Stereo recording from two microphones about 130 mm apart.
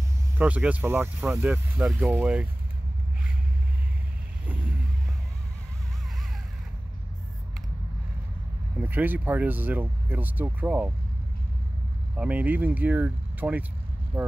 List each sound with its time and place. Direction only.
0.4 s speech: 10° right (ahead or behind)
8.8 s speech: 15° right (ahead or behind)
12.2 s speech: 10° right (ahead or behind)